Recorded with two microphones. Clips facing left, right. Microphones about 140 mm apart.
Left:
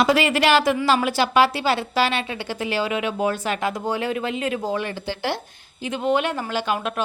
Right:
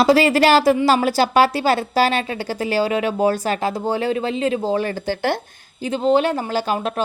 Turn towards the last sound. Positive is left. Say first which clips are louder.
# right 3 dB
turn(degrees=-35)  # may be behind; listen again after turning